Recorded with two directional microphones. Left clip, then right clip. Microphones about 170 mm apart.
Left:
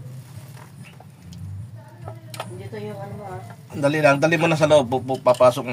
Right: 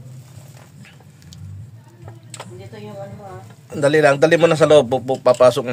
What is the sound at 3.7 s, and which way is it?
Speech, 55° right (ahead or behind).